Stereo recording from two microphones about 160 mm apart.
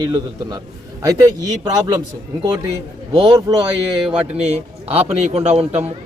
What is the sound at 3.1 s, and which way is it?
Speech, 25° right (ahead or behind).